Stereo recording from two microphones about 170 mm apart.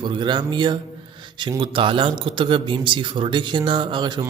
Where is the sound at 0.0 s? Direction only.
25° right (ahead or behind).